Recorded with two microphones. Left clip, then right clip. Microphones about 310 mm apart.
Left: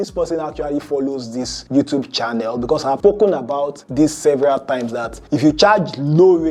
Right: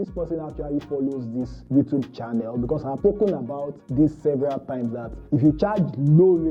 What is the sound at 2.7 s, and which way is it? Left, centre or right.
Speech, centre.